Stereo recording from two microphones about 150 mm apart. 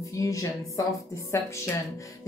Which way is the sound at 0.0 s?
20° left (ahead or behind).